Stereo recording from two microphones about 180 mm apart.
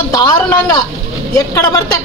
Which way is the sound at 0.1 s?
20° left (ahead or behind).